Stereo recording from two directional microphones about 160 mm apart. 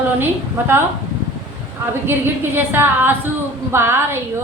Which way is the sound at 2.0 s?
15° right (ahead or behind).